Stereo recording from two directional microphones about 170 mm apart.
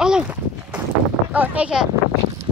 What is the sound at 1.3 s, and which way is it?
Speech, 10° right (ahead or behind).